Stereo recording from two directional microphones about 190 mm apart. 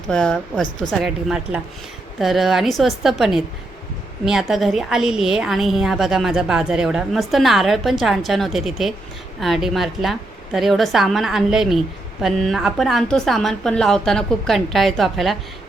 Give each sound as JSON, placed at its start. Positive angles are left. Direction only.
{"t": 0.1, "sound": "a woman's voice", "side_deg": 5}